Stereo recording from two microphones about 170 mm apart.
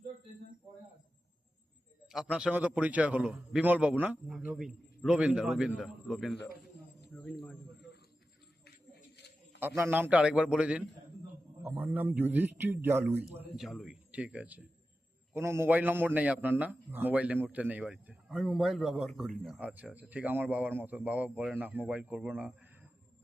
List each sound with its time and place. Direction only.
2.3 s a man's voice: 10° right (ahead or behind)
6.3 s a man's voice: 80° left
7.2 s cricket: 5° left (ahead or behind)
9.6 s a man's voice: 10° right (ahead or behind)
13.6 s a man's voice: centre (ahead or behind)